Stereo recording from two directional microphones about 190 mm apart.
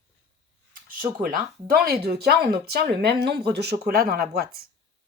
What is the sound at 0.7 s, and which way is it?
A woman's voice, 50° right (ahead or behind).